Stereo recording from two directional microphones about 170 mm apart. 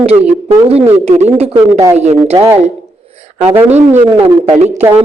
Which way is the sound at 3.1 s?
40° right (ahead or behind).